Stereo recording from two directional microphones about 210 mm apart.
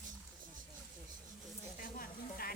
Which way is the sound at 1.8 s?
45° left (ahead or behind).